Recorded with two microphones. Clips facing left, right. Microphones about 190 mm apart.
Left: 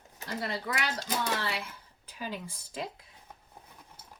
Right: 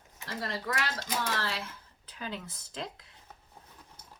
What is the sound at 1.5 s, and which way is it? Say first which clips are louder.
Speech: left 1 dB; 15° left (ahead or behind).